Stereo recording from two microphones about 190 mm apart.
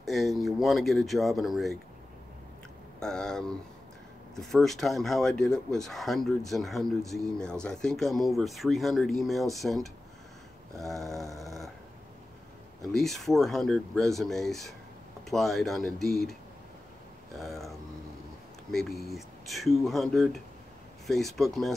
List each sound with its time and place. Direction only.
0.0 s speech: centre (ahead or behind)
3.0 s speech: 5° left (ahead or behind)
10.9 s speech: centre (ahead or behind)
11.3 s snoring: centre (ahead or behind)
12.9 s speech: centre (ahead or behind)
17.4 s speech: centre (ahead or behind)